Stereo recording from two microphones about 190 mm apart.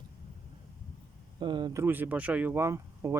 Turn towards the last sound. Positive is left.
turn(degrees=-15)  # may be behind; listen again after turning